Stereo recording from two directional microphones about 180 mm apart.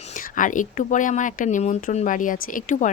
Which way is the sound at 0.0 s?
45° left (ahead or behind).